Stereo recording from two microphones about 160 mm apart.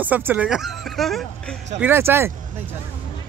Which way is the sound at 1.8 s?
15° right (ahead or behind).